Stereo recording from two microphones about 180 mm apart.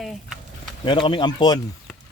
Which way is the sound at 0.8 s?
25° left (ahead or behind).